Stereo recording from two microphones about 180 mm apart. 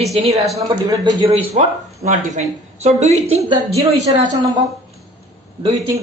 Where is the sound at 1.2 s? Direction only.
35° right (ahead or behind).